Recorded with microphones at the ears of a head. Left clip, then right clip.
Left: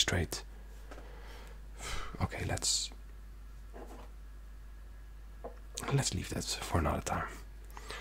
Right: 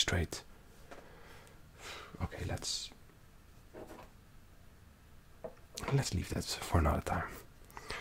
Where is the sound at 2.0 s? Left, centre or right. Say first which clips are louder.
Left 6 dB; left.